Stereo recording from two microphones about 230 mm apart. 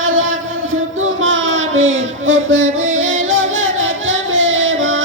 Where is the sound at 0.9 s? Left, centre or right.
Right.